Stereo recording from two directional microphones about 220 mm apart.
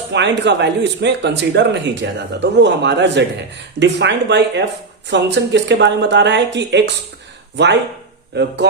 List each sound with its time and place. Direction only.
0.1 s speech: 50° right (ahead or behind)